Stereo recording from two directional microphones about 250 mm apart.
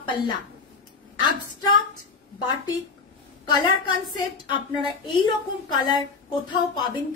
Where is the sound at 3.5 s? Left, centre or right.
Centre.